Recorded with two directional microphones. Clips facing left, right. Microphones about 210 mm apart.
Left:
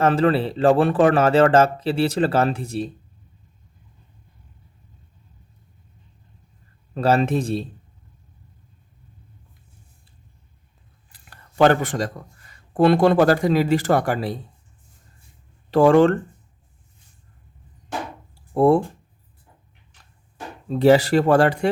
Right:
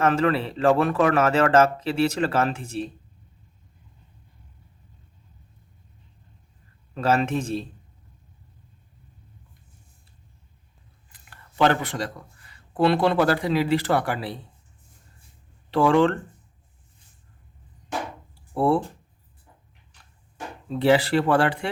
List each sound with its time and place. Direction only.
0.0 s speech: 30° left (ahead or behind)
6.9 s speech: 35° left (ahead or behind)
11.1 s speech: 40° left (ahead or behind)
15.7 s speech: 45° left (ahead or behind)
18.5 s speech: 45° left (ahead or behind)
20.7 s speech: 40° left (ahead or behind)